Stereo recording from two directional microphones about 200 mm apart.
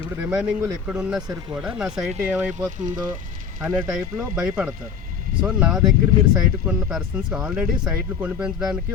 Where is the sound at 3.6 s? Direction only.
5° right (ahead or behind).